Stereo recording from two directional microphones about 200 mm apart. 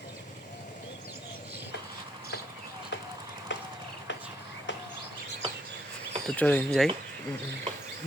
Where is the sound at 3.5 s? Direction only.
65° left (ahead or behind).